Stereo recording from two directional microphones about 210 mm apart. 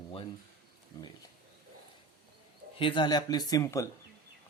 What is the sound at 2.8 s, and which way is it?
Speech, 25° left (ahead or behind).